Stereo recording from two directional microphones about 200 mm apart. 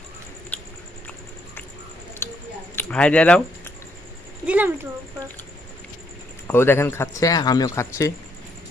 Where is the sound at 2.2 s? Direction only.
10° left (ahead or behind).